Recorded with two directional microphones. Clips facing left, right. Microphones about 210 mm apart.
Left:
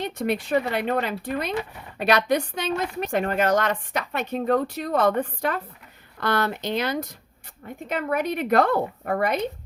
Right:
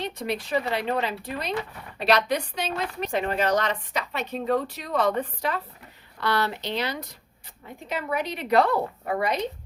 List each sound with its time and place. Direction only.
0.0 s speech: 50° left (ahead or behind)